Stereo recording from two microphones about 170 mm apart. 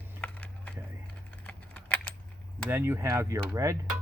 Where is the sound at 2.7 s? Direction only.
15° right (ahead or behind).